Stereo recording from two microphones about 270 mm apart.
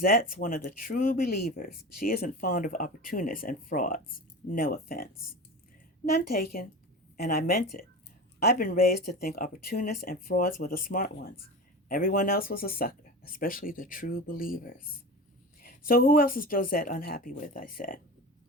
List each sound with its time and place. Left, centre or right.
0.0 s speech: left
6.1 s speech: left
8.9 s speech: left
9.2 s speech: left
15.9 s speech: left